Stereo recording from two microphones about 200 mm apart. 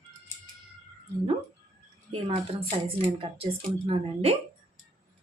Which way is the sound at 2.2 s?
30° right (ahead or behind).